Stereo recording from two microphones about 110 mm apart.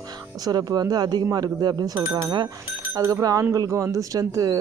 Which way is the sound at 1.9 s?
25° right (ahead or behind).